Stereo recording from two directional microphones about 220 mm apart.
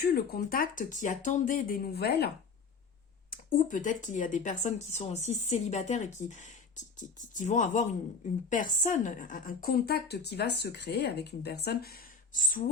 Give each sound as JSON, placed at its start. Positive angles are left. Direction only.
{"t": 0.0, "sound": "speech", "side_deg": 45}
{"t": 3.2, "sound": "speech", "side_deg": 35}